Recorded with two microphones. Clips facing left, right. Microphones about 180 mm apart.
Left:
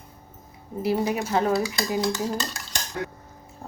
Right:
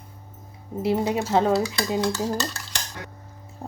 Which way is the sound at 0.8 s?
25° right (ahead or behind).